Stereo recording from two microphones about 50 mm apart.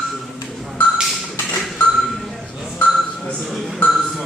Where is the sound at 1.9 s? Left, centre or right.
Centre.